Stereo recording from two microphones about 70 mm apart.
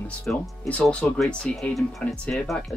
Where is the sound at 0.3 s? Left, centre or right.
Centre.